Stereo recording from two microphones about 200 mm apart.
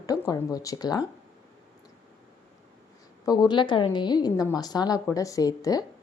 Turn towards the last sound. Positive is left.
turn(degrees=20)  # may be behind; listen again after turning